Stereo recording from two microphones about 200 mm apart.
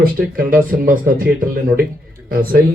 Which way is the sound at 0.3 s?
45° right (ahead or behind).